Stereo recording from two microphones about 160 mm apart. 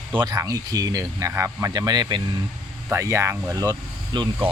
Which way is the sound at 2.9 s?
15° right (ahead or behind).